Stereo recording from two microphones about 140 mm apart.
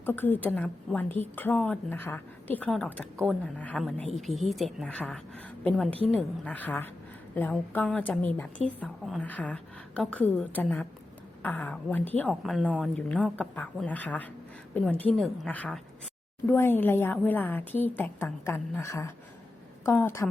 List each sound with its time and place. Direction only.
0.0 s a woman's voice: 15° left (ahead or behind)
12.3 s a woman's voice: centre (ahead or behind); by 20.2 s 15° left (ahead or behind)